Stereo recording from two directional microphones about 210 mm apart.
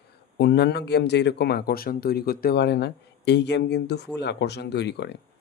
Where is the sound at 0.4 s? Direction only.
55° left (ahead or behind).